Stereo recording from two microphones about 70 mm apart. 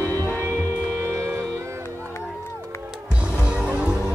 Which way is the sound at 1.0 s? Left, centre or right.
Right.